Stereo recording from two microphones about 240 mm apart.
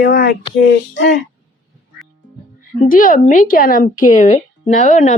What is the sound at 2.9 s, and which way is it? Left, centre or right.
A woman's voice, left.